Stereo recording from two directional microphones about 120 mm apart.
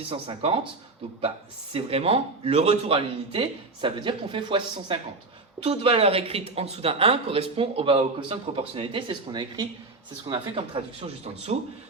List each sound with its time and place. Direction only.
0.0 s speech: 50° right (ahead or behind)
1.7 s speech: 55° right (ahead or behind)